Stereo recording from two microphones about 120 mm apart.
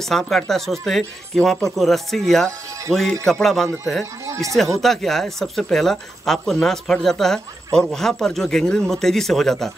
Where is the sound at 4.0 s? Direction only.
25° right (ahead or behind).